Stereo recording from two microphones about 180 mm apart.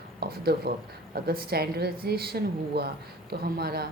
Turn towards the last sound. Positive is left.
turn(degrees=-60)  # may be behind; listen again after turning